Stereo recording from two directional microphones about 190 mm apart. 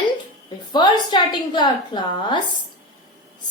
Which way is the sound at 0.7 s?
20° left (ahead or behind).